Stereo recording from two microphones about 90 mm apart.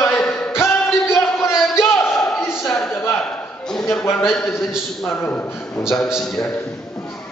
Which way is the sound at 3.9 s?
25° left (ahead or behind).